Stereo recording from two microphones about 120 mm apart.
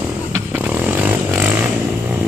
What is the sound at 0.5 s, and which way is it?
Vehicle, 15° right (ahead or behind).